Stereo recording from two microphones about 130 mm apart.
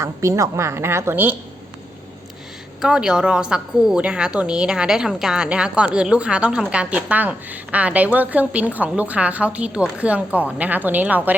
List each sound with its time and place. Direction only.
0.0 s a woman's voice: 20° right (ahead or behind)
2.8 s a woman's voice: 5° right (ahead or behind)